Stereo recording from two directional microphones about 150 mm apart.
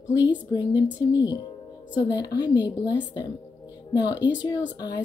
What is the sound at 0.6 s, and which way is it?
A woman's voice, 25° left (ahead or behind).